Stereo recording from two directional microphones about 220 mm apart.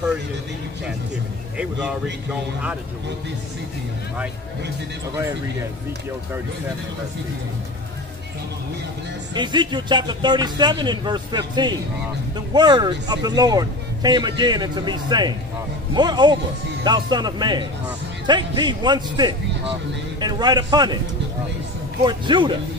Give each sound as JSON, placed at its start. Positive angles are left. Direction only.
{"t": 9.3, "sound": "speech", "side_deg": -20}
{"t": 22.0, "sound": "speech", "side_deg": -20}